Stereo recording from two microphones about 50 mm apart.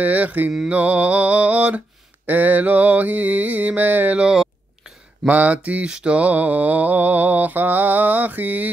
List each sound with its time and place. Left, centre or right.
0.0 s mantra: right
4.2 s speech: centre
5.3 s mantra: right